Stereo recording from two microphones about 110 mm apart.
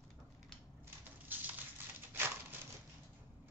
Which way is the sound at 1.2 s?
15° right (ahead or behind).